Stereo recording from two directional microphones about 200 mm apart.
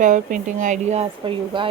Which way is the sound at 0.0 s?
40° right (ahead or behind).